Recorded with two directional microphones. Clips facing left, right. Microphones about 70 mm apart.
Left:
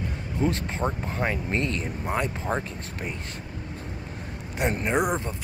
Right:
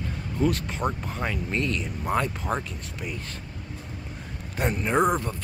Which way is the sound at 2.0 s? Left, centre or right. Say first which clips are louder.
Right 2 dB; left.